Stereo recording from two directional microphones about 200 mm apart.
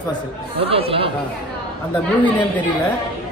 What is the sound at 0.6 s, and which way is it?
Speech, 30° right (ahead or behind).